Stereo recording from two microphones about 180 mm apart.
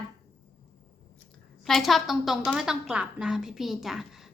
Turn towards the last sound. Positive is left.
turn(degrees=0)  # may be behind; listen again after turning